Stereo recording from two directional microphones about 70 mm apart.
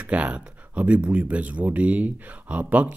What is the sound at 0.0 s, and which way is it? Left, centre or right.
Speech, centre.